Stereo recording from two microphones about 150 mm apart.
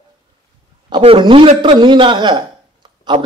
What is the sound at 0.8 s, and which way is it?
A man's voice, 35° right (ahead or behind).